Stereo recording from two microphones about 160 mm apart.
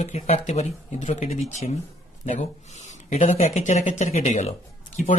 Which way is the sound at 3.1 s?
45° left (ahead or behind).